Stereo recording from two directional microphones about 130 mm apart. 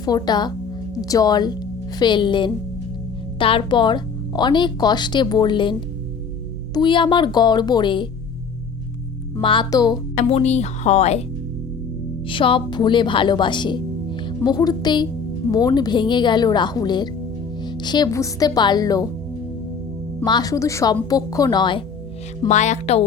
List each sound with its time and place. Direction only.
0.0 s speech: 30° left (ahead or behind)
6.7 s speech: 40° left (ahead or behind)
9.4 s speech: 40° left (ahead or behind)
10.2 s speech: 55° left (ahead or behind)
12.3 s speech: 40° left (ahead or behind)
20.2 s speech: 30° left (ahead or behind)
22.4 s speech: 65° left (ahead or behind)